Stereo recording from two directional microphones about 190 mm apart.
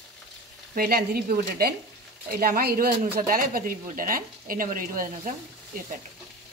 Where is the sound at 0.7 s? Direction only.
55° right (ahead or behind).